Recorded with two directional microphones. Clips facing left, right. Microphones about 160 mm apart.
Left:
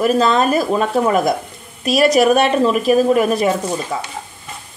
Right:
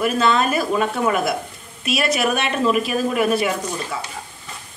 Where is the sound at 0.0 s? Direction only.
35° left (ahead or behind).